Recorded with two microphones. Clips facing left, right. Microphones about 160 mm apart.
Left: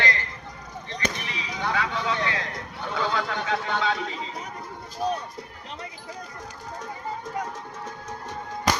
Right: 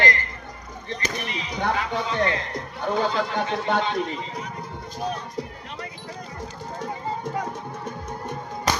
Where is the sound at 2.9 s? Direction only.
50° right (ahead or behind).